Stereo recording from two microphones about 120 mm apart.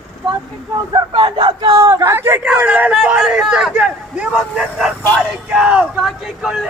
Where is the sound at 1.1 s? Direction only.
45° right (ahead or behind).